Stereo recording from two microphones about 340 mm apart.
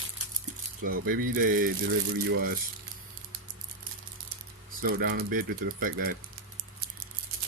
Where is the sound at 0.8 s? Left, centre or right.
Right.